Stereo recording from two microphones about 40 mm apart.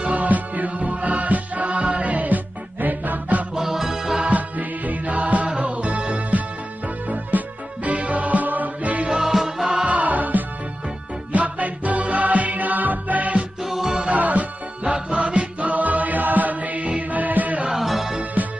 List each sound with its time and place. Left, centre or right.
0.0 s music: right
3.5 s music: centre
4.2 s music: right
9.3 s music: centre
9.8 s music: right
17.7 s music: centre